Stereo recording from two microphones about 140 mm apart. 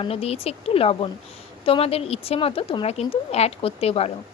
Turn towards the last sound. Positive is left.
turn(degrees=45)  # may be behind; listen again after turning